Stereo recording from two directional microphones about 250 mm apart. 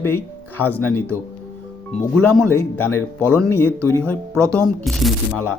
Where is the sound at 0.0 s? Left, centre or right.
Centre.